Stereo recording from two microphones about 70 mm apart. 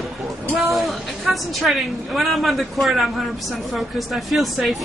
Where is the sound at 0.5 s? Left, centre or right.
Centre.